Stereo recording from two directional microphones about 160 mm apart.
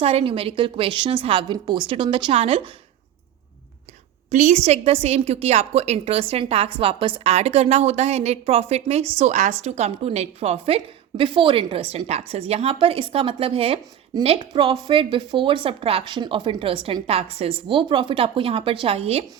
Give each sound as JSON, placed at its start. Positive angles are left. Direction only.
{"t": 0.0, "sound": "a woman's voice", "side_deg": -40}
{"t": 4.3, "sound": "a woman's voice", "side_deg": -45}